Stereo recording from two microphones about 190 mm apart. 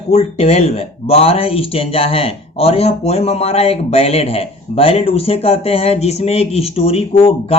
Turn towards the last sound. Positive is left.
turn(degrees=30)  # may be behind; listen again after turning